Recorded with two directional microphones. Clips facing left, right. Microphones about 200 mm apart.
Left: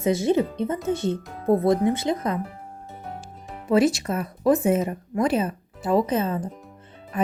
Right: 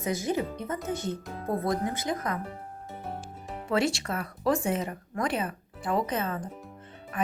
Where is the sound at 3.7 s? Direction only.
20° left (ahead or behind).